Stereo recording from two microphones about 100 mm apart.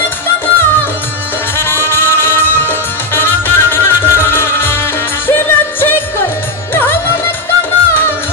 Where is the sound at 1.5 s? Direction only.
20° left (ahead or behind).